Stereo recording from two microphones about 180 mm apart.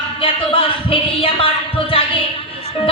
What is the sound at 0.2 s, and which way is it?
Speech, 30° left (ahead or behind).